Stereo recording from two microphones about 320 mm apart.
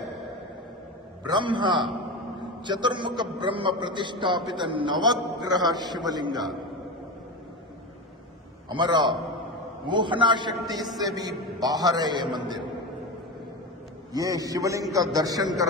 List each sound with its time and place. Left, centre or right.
1.2 s a man's voice: centre
8.6 s a man's voice: centre
14.1 s a man's voice: centre